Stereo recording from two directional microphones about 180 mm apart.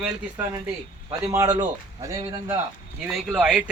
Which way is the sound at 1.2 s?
20° right (ahead or behind).